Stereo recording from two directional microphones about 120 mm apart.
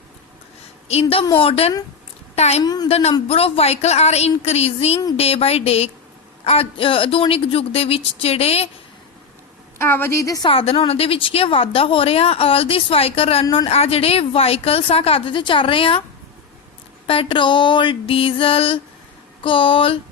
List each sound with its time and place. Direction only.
0.9 s a woman's voice: 60° left (ahead or behind)
2.3 s a woman's voice: 65° left (ahead or behind)
2.6 s speech: 35° left (ahead or behind)
2.9 s a woman's voice: 60° left (ahead or behind)
9.7 s a woman's voice: 20° left (ahead or behind)
10.4 s a woman's voice: 50° left (ahead or behind)
13.4 s speech: 35° left (ahead or behind)
13.7 s a woman's voice: 55° left (ahead or behind)
17.1 s a woman's voice: 50° left (ahead or behind)